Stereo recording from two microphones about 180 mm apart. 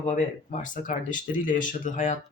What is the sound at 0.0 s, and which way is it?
Speech, 40° left (ahead or behind).